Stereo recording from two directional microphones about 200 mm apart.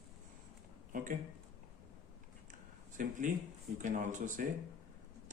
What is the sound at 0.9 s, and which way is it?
Speech, 40° right (ahead or behind).